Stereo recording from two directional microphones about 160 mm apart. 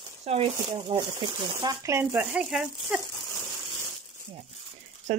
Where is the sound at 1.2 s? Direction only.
30° right (ahead or behind).